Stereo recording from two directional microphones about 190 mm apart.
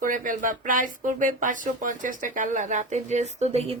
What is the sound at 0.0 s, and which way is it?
Speech, 45° right (ahead or behind).